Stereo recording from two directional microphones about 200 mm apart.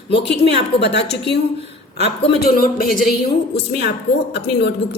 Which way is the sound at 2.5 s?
45° left (ahead or behind).